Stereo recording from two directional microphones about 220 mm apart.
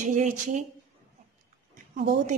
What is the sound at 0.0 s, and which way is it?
Speech, 35° right (ahead or behind).